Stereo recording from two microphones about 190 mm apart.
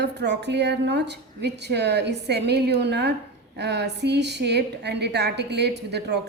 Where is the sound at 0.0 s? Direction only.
65° right (ahead or behind).